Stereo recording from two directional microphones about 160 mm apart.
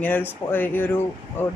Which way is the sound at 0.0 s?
10° left (ahead or behind).